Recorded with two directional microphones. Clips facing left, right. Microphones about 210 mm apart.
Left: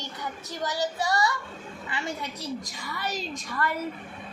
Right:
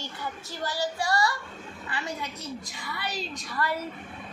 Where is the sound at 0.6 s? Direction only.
20° left (ahead or behind).